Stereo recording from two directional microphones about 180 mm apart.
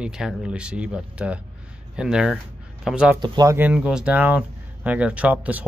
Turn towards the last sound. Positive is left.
turn(degrees=-10)  # may be behind; listen again after turning